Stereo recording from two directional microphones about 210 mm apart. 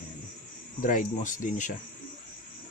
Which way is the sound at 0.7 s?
40° left (ahead or behind).